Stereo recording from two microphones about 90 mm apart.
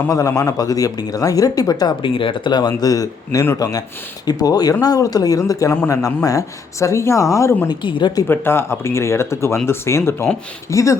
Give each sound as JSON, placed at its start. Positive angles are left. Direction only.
{"t": 0.1, "sound": "speech", "side_deg": 40}
{"t": 2.0, "sound": "speech", "side_deg": 70}
{"t": 7.7, "sound": "speech", "side_deg": 60}
{"t": 8.3, "sound": "speech", "side_deg": 25}